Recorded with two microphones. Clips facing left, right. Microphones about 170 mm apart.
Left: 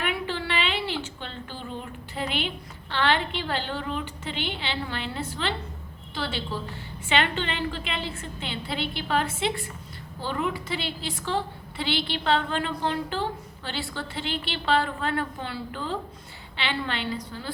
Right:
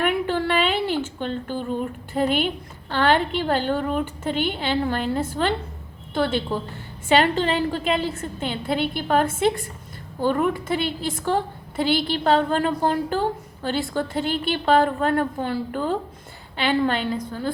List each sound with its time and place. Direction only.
0.0 s a sound: 50° right (ahead or behind)
2.9 s a woman's voice: 45° right (ahead or behind)
7.1 s a woman's voice: 40° right (ahead or behind)